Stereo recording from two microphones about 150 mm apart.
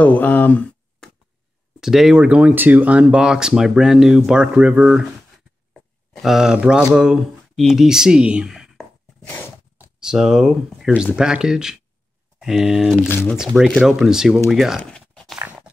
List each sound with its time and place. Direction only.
0.0 s speech: 10° left (ahead or behind)
1.8 s speech: centre (ahead or behind)
5.7 s a sound: centre (ahead or behind)
6.9 s speech: 5° right (ahead or behind)
13.1 s speech: 15° left (ahead or behind)
13.4 s speech: 5° right (ahead or behind)
14.8 s a sound: 5° left (ahead or behind)